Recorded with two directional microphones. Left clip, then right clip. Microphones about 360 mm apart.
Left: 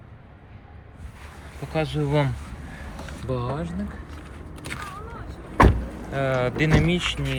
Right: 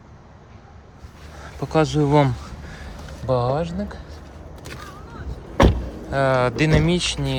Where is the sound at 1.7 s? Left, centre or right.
Centre.